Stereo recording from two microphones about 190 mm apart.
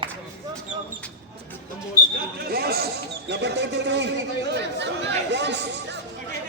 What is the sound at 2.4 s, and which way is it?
Chatter, 55° right (ahead or behind).